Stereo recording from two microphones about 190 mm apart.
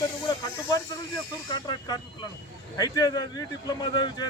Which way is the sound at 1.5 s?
25° left (ahead or behind).